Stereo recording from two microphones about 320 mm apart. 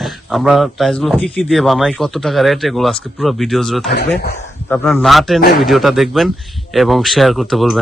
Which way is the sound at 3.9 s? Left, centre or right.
Left.